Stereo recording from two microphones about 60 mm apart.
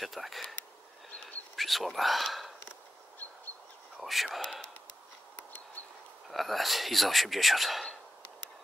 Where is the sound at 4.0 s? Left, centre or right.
Centre.